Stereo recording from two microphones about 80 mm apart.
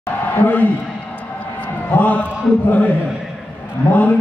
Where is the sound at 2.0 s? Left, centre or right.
Left.